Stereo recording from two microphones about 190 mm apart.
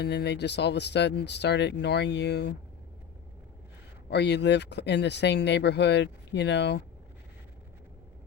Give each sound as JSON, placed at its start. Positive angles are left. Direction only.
{"t": 0.0, "sound": "speech", "side_deg": 60}
{"t": 4.1, "sound": "speech", "side_deg": 60}